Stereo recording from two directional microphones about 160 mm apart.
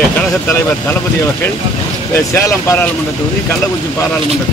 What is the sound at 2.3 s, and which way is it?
Speech, 20° left (ahead or behind).